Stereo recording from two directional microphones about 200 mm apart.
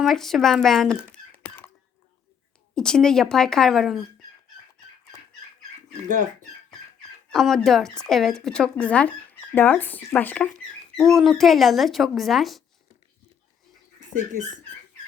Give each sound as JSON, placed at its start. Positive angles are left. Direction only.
{"t": 0.0, "sound": "speech", "side_deg": 0}
{"t": 2.7, "sound": "speech", "side_deg": 5}
{"t": 6.1, "sound": "speech", "side_deg": -40}
{"t": 7.3, "sound": "speech", "side_deg": 0}